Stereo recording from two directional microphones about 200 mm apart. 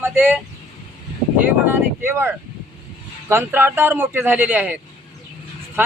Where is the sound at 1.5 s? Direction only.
10° right (ahead or behind).